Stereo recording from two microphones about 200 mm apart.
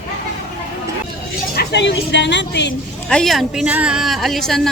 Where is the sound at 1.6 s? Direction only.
60° left (ahead or behind).